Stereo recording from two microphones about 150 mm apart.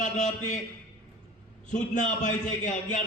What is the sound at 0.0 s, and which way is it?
Speech, 55° left (ahead or behind).